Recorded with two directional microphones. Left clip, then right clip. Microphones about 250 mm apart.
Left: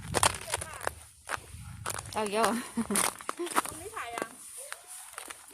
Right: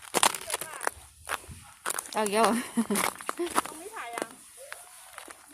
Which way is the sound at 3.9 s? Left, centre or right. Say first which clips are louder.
Even; left.